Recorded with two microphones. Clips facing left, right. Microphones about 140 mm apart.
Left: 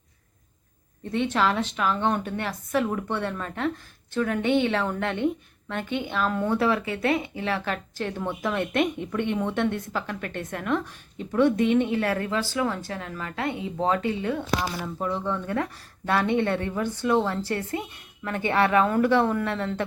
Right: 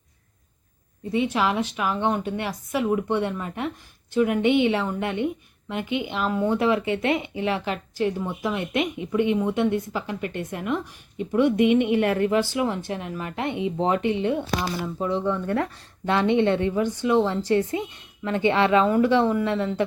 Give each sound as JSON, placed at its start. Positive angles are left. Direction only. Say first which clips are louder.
{"t": 1.1, "sound": "a woman's voice", "louder": "right 1 dB", "side_deg": -10}